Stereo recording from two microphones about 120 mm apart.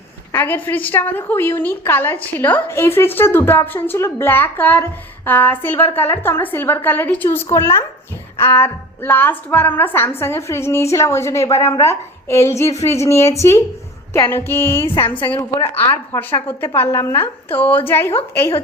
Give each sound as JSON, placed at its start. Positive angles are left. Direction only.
{"t": 0.3, "sound": "a woman's voice", "side_deg": 15}